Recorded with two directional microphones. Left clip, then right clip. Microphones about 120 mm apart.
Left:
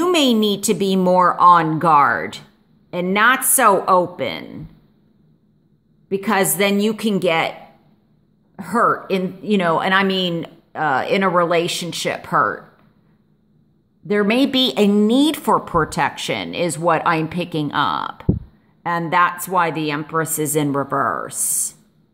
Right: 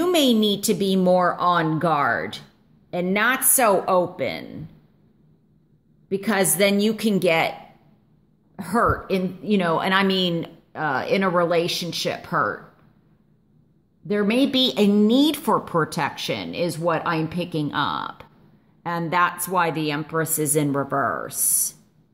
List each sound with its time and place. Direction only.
0.0 s speech: 20° left (ahead or behind)
6.0 s a woman's voice: 20° left (ahead or behind)
8.5 s speech: 10° left (ahead or behind)
9.8 s a woman's voice: 10° left (ahead or behind)
10.7 s speech: 20° left (ahead or behind)
14.0 s a woman's voice: 30° left (ahead or behind)